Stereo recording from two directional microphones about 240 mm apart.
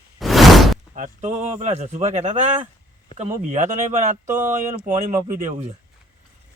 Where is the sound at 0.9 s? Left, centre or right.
Right.